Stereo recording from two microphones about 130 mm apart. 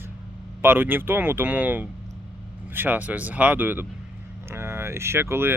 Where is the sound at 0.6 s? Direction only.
15° right (ahead or behind).